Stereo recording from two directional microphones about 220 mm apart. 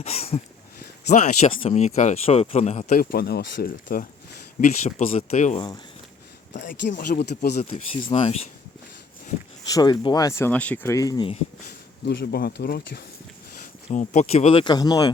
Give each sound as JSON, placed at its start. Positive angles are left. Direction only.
{"t": 0.0, "sound": "speech", "side_deg": 25}
{"t": 7.1, "sound": "speech", "side_deg": 50}
{"t": 8.0, "sound": "speech", "side_deg": 30}
{"t": 9.6, "sound": "speech", "side_deg": 20}
{"t": 12.0, "sound": "speech", "side_deg": 45}
{"t": 13.9, "sound": "speech", "side_deg": 35}